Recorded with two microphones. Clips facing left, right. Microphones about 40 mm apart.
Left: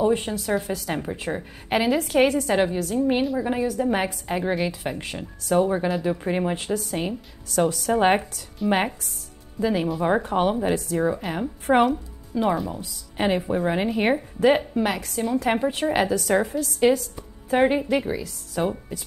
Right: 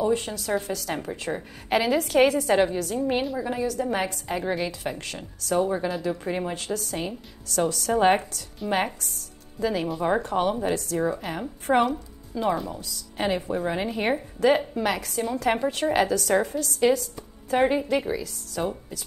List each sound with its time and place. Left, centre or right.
0.0 s a woman's voice: left
3.4 s a woman's voice: centre
12.8 s a woman's voice: centre
14.7 s a woman's voice: centre
17.9 s a woman's voice: centre